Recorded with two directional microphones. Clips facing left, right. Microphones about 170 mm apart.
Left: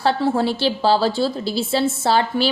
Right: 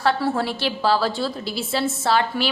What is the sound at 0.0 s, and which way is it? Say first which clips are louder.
A woman's voice: left 3 dB; 25° left (ahead or behind).